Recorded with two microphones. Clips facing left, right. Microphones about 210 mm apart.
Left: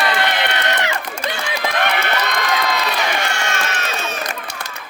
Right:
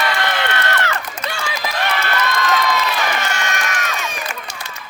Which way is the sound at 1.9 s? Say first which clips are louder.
Even; 20° left (ahead or behind).